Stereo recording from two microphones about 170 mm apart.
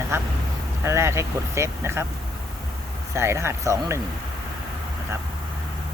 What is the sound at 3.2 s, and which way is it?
Speech, 15° right (ahead or behind).